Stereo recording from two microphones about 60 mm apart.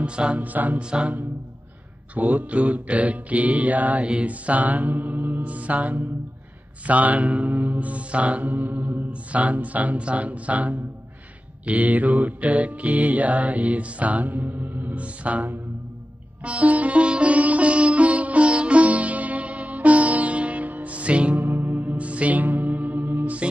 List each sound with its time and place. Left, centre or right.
0.0 s mantra: centre
0.8 s music: centre
2.1 s mantra: right
16.4 s sitar: right
21.6 s music: right